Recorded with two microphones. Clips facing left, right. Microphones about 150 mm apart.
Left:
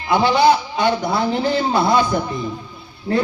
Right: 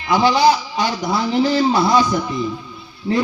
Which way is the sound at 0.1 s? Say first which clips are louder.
Even; 55° left (ahead or behind).